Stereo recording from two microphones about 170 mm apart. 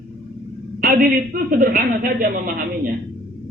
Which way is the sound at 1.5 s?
60° right (ahead or behind).